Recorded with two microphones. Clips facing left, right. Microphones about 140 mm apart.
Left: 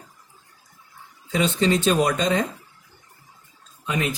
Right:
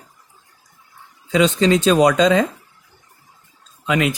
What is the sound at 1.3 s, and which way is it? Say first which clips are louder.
Speech: right 6 dB; 90° right.